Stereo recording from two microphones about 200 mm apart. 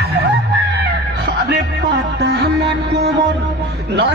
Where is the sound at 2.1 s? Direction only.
55° right (ahead or behind).